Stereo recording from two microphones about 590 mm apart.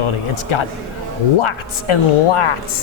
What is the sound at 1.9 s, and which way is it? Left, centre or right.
Speech, left.